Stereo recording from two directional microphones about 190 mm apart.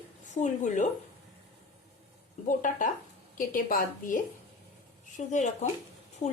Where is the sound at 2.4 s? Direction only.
45° left (ahead or behind).